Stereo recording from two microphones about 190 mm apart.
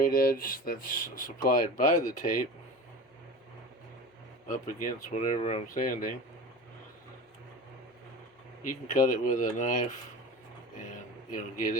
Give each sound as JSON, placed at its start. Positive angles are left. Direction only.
{"t": 0.0, "sound": "speech", "side_deg": 50}
{"t": 4.4, "sound": "speech", "side_deg": 40}
{"t": 8.6, "sound": "speech", "side_deg": 45}
{"t": 11.3, "sound": "speech", "side_deg": 45}